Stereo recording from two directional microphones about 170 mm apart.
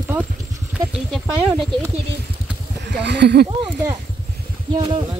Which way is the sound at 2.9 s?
90° right.